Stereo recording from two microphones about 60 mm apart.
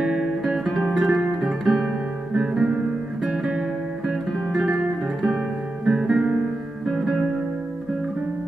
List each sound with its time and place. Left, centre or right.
0.0 s guitar: centre
2.3 s music: centre
4.3 s guitar: centre
5.9 s music: centre